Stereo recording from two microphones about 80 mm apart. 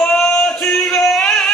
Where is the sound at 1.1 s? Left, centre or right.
Centre.